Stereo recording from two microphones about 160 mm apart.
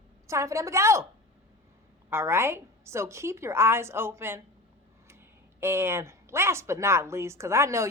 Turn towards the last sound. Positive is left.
turn(degrees=-15)  # may be behind; listen again after turning